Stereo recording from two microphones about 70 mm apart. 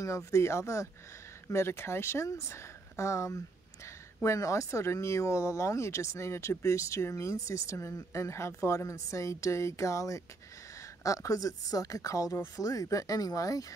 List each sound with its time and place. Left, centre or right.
0.0 s speech: left